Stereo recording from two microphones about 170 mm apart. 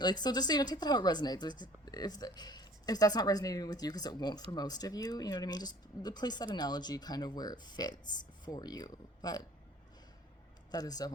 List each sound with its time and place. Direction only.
0.0 s a woman's voice: 25° left (ahead or behind)
10.7 s a woman's voice: 20° left (ahead or behind)